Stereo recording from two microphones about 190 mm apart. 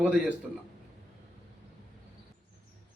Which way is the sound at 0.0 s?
5° right (ahead or behind).